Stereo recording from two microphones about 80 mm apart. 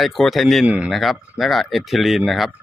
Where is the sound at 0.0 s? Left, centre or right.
Centre.